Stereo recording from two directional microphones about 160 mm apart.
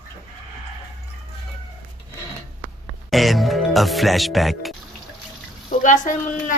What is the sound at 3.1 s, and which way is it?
Music, centre (ahead or behind).